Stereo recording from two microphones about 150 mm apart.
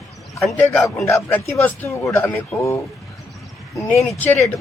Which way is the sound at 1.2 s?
15° left (ahead or behind).